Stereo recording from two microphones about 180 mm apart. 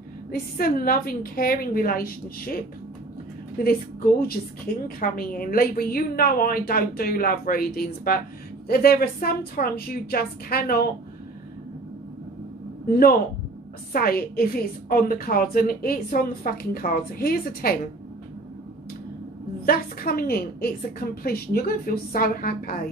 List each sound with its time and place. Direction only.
0.3 s a woman's voice: 55° left (ahead or behind)
4.8 s a woman's voice: 55° left (ahead or behind)
13.9 s a woman's voice: 55° left (ahead or behind)
19.6 s a woman's voice: 55° left (ahead or behind)